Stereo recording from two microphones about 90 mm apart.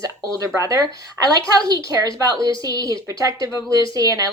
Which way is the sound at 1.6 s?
40° right (ahead or behind).